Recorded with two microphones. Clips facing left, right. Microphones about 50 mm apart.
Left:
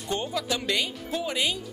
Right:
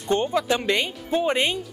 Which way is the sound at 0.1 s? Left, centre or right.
Right.